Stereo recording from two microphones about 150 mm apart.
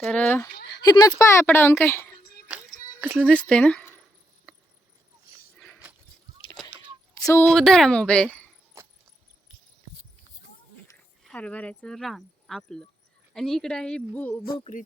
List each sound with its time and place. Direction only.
0.0 s speech: 10° left (ahead or behind)
0.8 s speech: 25° left (ahead or behind)
3.0 s speech: 10° right (ahead or behind)
3.2 s speech: 5° left (ahead or behind)
7.4 s a woman's voice: 5° left (ahead or behind)
11.2 s a woman's voice: 5° left (ahead or behind)